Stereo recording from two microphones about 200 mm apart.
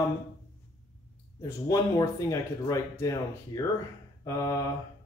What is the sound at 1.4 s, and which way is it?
Speech, 15° left (ahead or behind).